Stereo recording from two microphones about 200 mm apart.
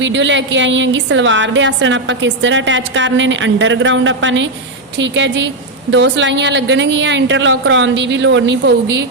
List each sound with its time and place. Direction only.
0.0 s a woman's voice: 65° right (ahead or behind)